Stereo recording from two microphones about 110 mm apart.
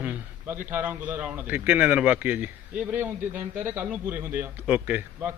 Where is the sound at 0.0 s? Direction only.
15° right (ahead or behind).